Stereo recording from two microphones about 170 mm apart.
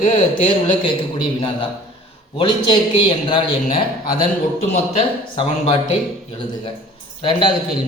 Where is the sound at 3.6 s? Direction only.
55° left (ahead or behind).